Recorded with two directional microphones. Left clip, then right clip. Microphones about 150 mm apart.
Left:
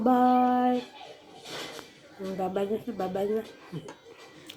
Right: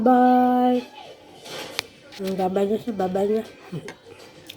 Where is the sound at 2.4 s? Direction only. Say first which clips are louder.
Right 7 dB; 40° right (ahead or behind).